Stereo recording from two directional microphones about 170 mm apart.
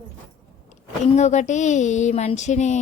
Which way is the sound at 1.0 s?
45° left (ahead or behind).